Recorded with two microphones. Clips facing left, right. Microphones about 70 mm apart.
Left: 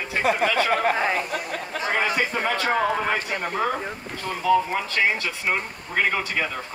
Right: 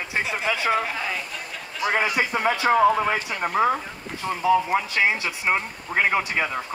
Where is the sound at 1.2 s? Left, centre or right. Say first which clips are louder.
Left 6 dB; left.